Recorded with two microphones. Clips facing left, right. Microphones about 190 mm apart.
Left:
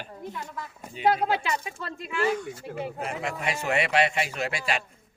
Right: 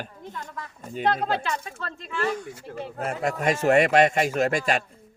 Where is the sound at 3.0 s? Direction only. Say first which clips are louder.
Right 9 dB; 45° right (ahead or behind).